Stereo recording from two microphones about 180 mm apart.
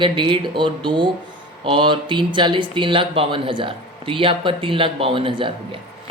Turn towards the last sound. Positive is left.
turn(degrees=-30)  # may be behind; listen again after turning